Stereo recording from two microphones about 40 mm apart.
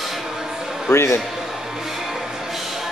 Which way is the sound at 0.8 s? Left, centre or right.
Left.